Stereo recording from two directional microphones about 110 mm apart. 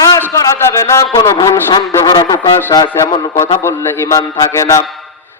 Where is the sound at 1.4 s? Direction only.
25° left (ahead or behind).